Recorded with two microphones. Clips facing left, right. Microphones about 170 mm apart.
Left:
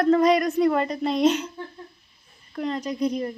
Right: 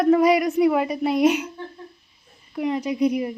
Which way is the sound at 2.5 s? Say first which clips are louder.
Right 4 dB; 10° right (ahead or behind).